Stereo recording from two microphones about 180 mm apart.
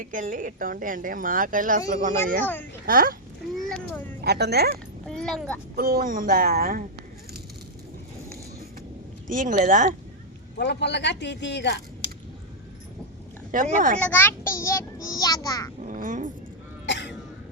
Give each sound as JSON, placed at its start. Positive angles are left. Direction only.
{"t": 0.0, "sound": "speech", "side_deg": -50}
{"t": 2.4, "sound": "a child's voice", "side_deg": 10}
{"t": 2.8, "sound": "speech", "side_deg": -50}
{"t": 3.7, "sound": "vehicle", "side_deg": 5}
{"t": 4.2, "sound": "a woman's voice", "side_deg": -65}
{"t": 5.0, "sound": "speech", "side_deg": 5}
{"t": 5.7, "sound": "speech", "side_deg": -55}
{"t": 9.2, "sound": "speech", "side_deg": -45}
{"t": 10.6, "sound": "speech", "side_deg": 70}
{"t": 12.0, "sound": "a sound", "side_deg": 25}
{"t": 13.5, "sound": "speech", "side_deg": -45}
{"t": 14.0, "sound": "a child's voice", "side_deg": 10}
{"t": 15.8, "sound": "babbling", "side_deg": -45}
{"t": 16.8, "sound": "cough", "side_deg": 85}